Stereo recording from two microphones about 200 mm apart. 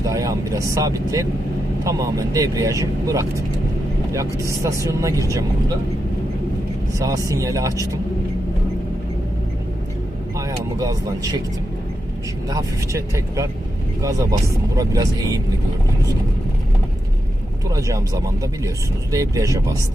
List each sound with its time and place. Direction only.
0.0 s speech: 15° right (ahead or behind)
7.3 s speech: 15° right (ahead or behind)
10.3 s speech: 15° right (ahead or behind)
12.5 s speech: 15° right (ahead or behind)
17.7 s speech: 15° right (ahead or behind)